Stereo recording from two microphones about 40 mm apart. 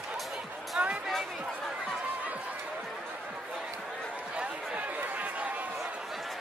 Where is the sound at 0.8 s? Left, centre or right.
Right.